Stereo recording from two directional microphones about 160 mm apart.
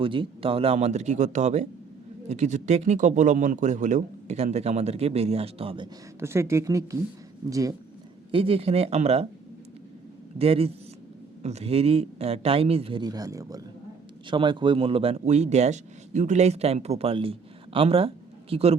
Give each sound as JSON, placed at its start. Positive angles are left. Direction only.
{"t": 0.0, "sound": "speech", "side_deg": -35}
{"t": 6.1, "sound": "a woman's voice", "side_deg": -15}
{"t": 8.3, "sound": "a man's voice", "side_deg": -35}
{"t": 10.3, "sound": "a man's voice", "side_deg": -35}